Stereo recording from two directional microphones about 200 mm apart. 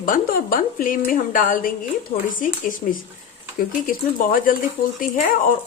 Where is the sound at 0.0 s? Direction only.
45° left (ahead or behind).